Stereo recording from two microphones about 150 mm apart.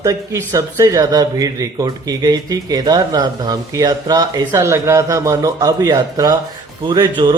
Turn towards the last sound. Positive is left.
turn(degrees=-25)  # may be behind; listen again after turning